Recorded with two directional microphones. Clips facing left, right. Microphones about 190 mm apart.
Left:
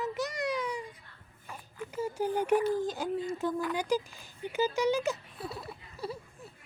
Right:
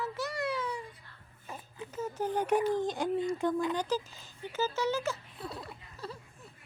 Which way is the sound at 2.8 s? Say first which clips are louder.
Right 2 dB; 5° left (ahead or behind).